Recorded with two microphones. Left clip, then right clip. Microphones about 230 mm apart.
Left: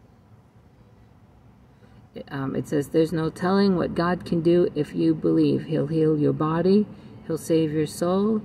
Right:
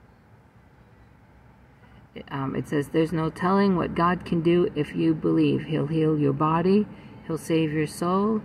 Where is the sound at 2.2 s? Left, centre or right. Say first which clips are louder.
Left 1 dB; centre.